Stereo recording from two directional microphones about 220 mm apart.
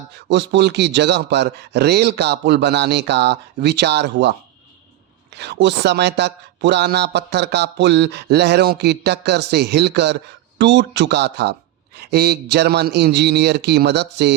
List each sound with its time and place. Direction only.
0.3 s a man's voice: 55° right (ahead or behind)
5.4 s a man's voice: 50° right (ahead or behind)